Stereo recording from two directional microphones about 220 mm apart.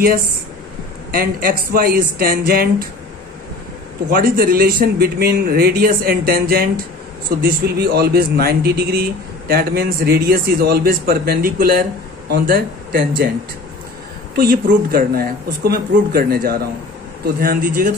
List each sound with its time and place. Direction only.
1.1 s a man's voice: 40° right (ahead or behind)
4.1 s a man's voice: 40° right (ahead or behind)
14.3 s a man's voice: 40° right (ahead or behind)